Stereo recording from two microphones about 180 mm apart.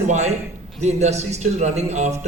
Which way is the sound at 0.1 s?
40° right (ahead or behind).